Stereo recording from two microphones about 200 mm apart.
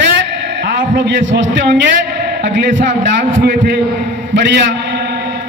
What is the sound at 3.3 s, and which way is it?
Speech, 55° right (ahead or behind).